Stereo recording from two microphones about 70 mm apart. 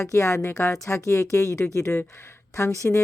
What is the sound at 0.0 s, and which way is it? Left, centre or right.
A woman's voice, left.